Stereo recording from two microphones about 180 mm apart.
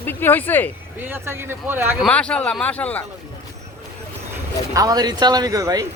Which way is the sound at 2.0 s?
5° left (ahead or behind).